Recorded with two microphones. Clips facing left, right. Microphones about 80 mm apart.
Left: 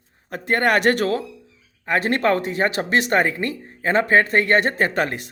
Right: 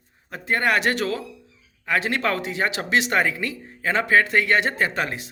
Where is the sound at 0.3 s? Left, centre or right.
Left.